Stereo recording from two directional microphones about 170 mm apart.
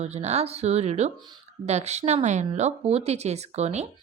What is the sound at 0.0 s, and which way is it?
A woman's voice, 40° right (ahead or behind).